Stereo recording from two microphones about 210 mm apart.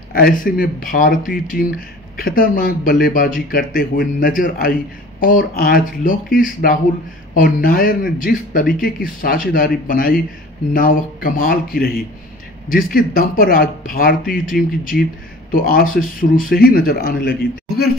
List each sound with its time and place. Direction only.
0.1 s speech: 40° left (ahead or behind)
15.5 s speech: 45° left (ahead or behind)